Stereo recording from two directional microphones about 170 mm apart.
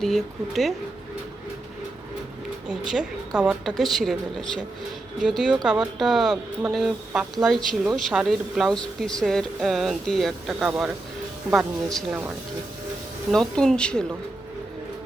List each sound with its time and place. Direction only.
0.0 s speech: centre (ahead or behind)
2.6 s speech: 5° right (ahead or behind)
13.3 s speech: centre (ahead or behind)